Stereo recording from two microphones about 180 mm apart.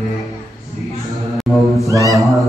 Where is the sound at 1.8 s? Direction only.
20° right (ahead or behind).